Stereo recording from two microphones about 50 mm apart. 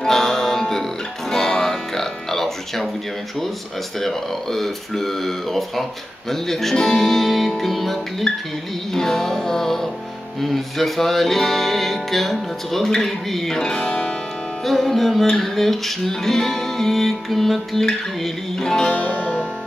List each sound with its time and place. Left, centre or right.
0.0 s music: centre
4.0 s music: centre
14.6 s music: centre
18.9 s music: left